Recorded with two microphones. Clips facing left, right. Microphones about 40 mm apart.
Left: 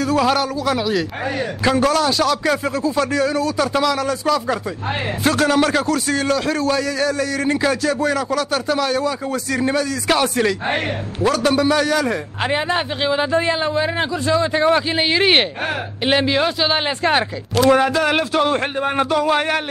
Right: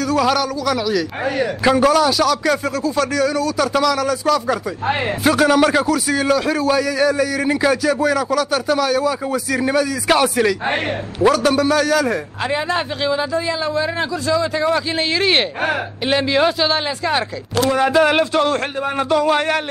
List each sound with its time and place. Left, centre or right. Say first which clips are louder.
0.0 s speech: even; centre
1.6 s speech: right 2 dB; centre
5.2 s a man's voice: right 2 dB; centre
12.4 s a man's voice: left 1 dB; left
15.0 s a man's voice: left 1 dB; left
17.8 s a man's voice: right 3 dB; centre